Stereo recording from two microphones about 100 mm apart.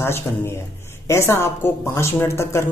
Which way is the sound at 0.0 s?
25° left (ahead or behind).